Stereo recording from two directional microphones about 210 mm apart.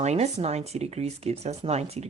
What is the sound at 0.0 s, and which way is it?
Speech, 30° right (ahead or behind).